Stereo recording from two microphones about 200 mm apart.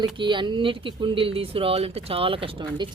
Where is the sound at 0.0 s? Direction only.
25° right (ahead or behind).